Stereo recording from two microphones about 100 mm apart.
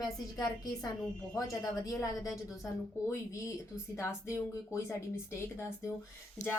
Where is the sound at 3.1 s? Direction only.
30° left (ahead or behind).